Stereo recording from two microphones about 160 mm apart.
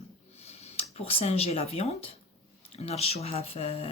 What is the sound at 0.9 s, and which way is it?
Speech, 40° left (ahead or behind).